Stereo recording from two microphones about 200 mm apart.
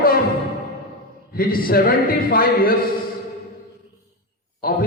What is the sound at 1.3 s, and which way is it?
A man's voice, 45° left (ahead or behind).